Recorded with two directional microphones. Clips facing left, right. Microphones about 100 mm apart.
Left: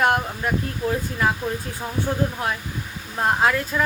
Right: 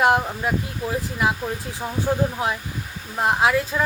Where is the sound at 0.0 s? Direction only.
20° right (ahead or behind).